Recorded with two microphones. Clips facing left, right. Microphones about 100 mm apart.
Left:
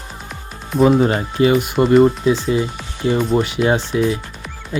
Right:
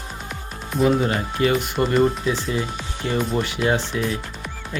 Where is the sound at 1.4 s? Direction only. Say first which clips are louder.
Left 6 dB; 20° left (ahead or behind).